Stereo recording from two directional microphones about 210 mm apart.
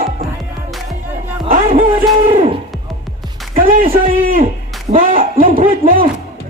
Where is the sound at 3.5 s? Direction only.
40° right (ahead or behind).